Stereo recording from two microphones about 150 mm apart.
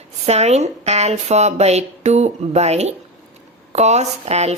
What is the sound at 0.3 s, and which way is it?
A woman's voice, 45° right (ahead or behind).